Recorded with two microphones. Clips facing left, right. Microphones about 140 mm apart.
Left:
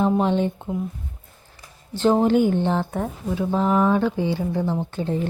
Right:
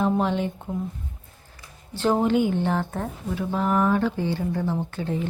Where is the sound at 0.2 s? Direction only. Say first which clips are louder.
Left 3 dB; 25° left (ahead or behind).